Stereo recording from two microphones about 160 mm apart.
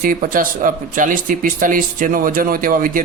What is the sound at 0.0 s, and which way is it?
Speech, 60° right (ahead or behind).